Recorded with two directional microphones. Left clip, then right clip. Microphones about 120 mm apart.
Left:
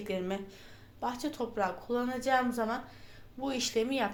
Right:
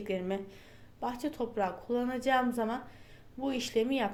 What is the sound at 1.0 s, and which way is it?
A woman's voice, 35° right (ahead or behind).